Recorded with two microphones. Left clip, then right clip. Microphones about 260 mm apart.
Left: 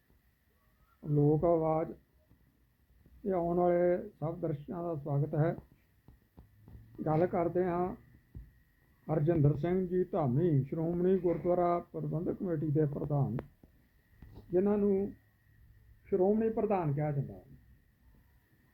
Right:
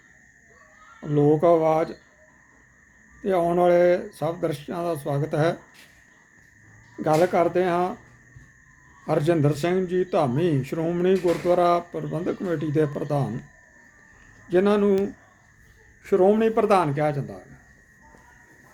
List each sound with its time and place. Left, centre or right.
1.1 s speech: centre
3.2 s speech: centre
7.0 s speech: centre
9.0 s speech: centre
14.5 s speech: centre
16.0 s speech: centre